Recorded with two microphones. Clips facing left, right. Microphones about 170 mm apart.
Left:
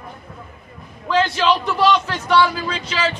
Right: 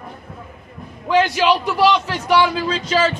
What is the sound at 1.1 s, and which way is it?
A man's voice, 15° right (ahead or behind).